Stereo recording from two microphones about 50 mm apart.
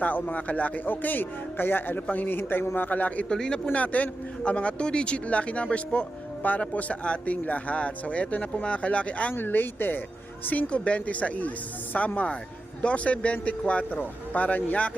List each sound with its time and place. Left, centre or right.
0.0 s speech: left
3.2 s speech: centre
3.7 s speech: left
9.3 s speech: left